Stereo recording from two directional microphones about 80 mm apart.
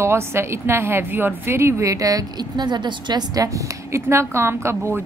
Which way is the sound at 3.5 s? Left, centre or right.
Right.